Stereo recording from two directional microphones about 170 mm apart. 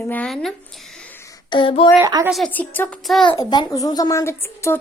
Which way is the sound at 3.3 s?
20° left (ahead or behind).